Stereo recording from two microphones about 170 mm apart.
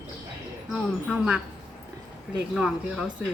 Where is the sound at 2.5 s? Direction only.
Centre (ahead or behind).